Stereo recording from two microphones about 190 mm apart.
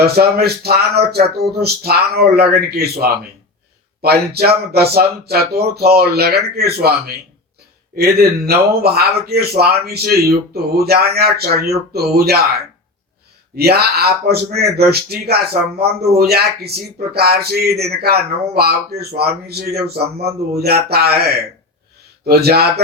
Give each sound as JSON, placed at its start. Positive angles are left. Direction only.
{"t": 0.0, "sound": "speech", "side_deg": -55}
{"t": 4.0, "sound": "speech", "side_deg": -55}
{"t": 7.9, "sound": "speech", "side_deg": -55}
{"t": 13.6, "sound": "speech", "side_deg": -55}